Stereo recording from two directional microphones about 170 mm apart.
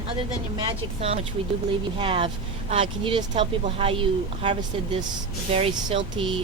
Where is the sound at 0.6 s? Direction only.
30° right (ahead or behind).